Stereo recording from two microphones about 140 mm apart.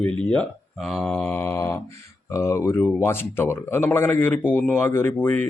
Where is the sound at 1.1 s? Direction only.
15° left (ahead or behind).